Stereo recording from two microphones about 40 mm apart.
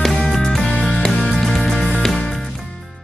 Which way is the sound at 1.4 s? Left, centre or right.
Centre.